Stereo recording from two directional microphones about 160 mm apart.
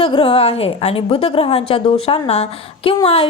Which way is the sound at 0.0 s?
35° left (ahead or behind).